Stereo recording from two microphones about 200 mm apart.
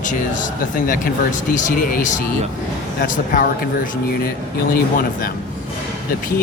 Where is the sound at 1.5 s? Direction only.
40° left (ahead or behind).